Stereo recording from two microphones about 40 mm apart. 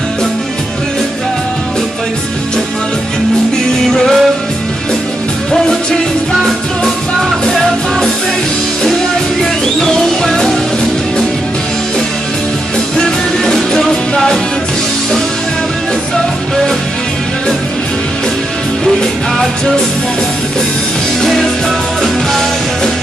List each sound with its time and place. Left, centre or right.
3.9 s music: centre
5.5 s music: centre
9.4 s music: centre
12.9 s music: centre